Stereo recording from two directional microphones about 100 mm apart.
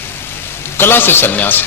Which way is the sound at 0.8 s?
20° left (ahead or behind).